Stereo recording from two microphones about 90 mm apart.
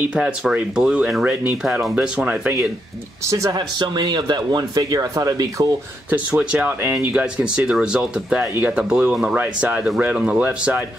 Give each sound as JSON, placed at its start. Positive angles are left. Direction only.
{"t": 0.1, "sound": "speech", "side_deg": -10}
{"t": 3.3, "sound": "speech", "side_deg": -35}
{"t": 3.5, "sound": "speech", "side_deg": -50}
{"t": 6.3, "sound": "speech", "side_deg": -15}
{"t": 9.4, "sound": "speech", "side_deg": -20}